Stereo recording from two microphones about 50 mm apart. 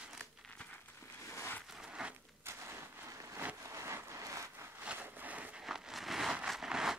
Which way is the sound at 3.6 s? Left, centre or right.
Right.